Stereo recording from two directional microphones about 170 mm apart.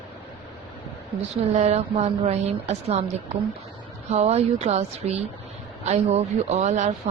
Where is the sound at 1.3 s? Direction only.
40° right (ahead or behind).